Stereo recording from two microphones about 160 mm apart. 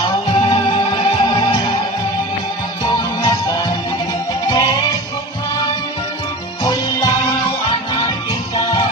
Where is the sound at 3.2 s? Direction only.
25° left (ahead or behind).